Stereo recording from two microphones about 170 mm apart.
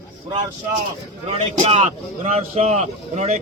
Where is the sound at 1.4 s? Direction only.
35° right (ahead or behind).